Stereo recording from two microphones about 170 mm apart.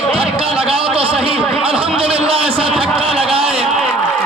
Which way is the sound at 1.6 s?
30° right (ahead or behind).